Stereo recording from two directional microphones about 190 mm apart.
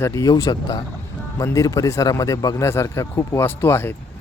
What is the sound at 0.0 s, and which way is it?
Speech, 15° left (ahead or behind).